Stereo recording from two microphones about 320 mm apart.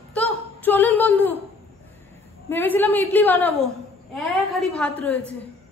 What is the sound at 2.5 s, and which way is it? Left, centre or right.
A woman's voice, centre.